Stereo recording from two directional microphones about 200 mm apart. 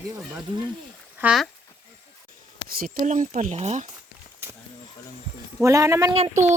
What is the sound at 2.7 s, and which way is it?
Speech, 45° right (ahead or behind).